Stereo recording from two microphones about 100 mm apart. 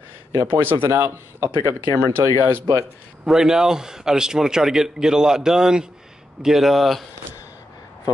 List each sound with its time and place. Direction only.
0.5 s speech: 20° right (ahead or behind)
3.3 s a man's voice: 5° right (ahead or behind)